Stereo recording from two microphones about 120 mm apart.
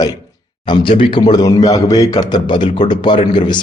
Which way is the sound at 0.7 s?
45° left (ahead or behind).